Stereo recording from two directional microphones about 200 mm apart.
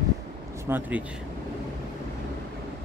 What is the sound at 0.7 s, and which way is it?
Speech, 10° right (ahead or behind).